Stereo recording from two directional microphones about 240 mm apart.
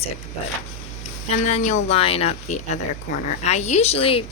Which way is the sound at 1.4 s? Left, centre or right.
Left.